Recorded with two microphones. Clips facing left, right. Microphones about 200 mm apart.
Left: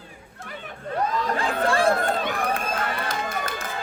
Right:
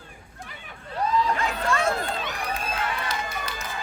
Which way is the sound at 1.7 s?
30° left (ahead or behind).